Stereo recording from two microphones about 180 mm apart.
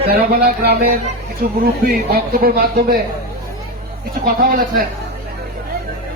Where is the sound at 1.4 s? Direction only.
60° right (ahead or behind).